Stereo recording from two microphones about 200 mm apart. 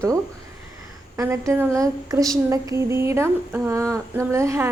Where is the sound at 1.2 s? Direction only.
15° right (ahead or behind).